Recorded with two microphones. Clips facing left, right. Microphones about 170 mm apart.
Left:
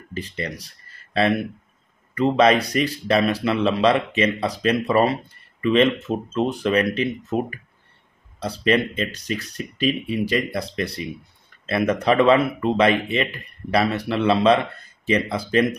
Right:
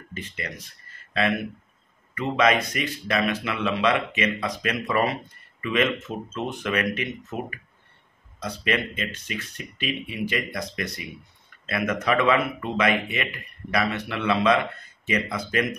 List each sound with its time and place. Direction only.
0.1 s speech: 35° left (ahead or behind)